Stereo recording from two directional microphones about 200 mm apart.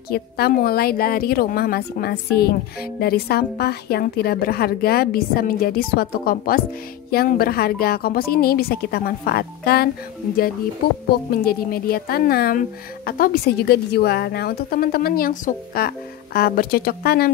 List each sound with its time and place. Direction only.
0.1 s a woman's voice: 50° left (ahead or behind)
11.4 s a woman's voice: 50° left (ahead or behind)